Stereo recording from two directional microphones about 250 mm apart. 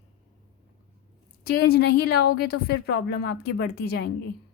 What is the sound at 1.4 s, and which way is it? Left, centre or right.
A woman's voice, left.